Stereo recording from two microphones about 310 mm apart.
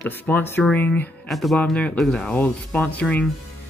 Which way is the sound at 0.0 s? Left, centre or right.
Centre.